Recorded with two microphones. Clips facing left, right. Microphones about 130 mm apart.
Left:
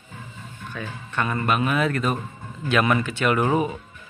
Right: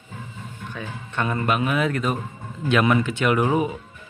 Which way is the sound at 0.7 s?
20° right (ahead or behind).